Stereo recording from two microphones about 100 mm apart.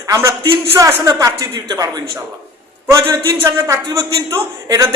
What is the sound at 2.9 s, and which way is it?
Speech, 35° right (ahead or behind).